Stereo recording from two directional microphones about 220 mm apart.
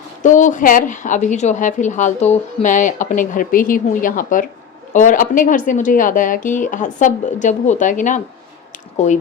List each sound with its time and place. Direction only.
0.2 s a woman's voice: 35° left (ahead or behind)